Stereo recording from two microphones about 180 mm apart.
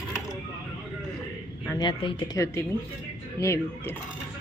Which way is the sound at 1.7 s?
25° left (ahead or behind).